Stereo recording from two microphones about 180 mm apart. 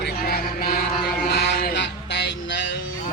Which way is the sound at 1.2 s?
60° left (ahead or behind).